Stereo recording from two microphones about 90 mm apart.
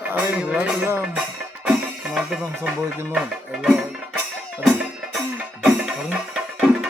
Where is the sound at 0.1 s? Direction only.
20° right (ahead or behind).